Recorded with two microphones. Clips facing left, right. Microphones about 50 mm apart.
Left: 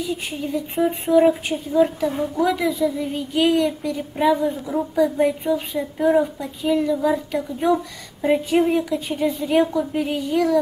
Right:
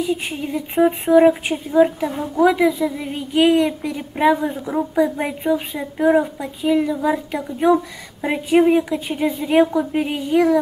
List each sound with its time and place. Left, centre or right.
0.5 s a woman's voice: right